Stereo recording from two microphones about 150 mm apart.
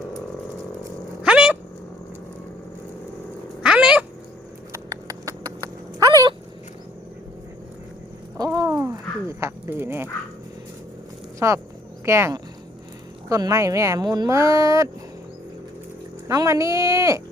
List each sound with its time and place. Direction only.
1.2 s cat: 5° right (ahead or behind)
3.6 s cat: 5° right (ahead or behind)
4.7 s dog: 25° right (ahead or behind)
8.4 s a sound: 25° right (ahead or behind)
11.3 s speech: 20° right (ahead or behind)
16.2 s speech: 20° right (ahead or behind)